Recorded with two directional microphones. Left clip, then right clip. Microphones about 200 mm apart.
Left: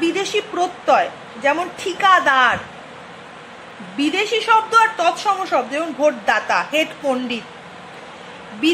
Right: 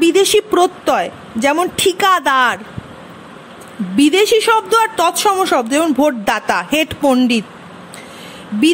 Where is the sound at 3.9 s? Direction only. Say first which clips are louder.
Right 8 dB; 60° right (ahead or behind).